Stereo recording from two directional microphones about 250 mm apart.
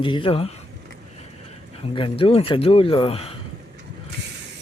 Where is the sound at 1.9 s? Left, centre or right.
Left.